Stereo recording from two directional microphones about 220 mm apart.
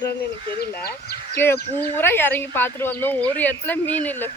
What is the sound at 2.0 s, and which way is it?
Speech, 10° left (ahead or behind).